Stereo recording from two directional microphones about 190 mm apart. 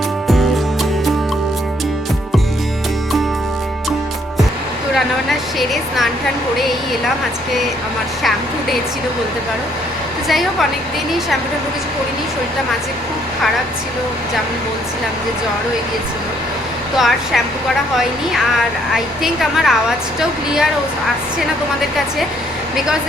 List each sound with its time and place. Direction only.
5.5 s a woman's voice: centre (ahead or behind)
10.2 s a woman's voice: centre (ahead or behind)
17.0 s a woman's voice: centre (ahead or behind)
18.9 s a woman's voice: centre (ahead or behind)